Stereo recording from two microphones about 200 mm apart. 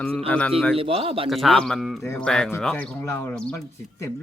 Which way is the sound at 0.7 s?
30° right (ahead or behind).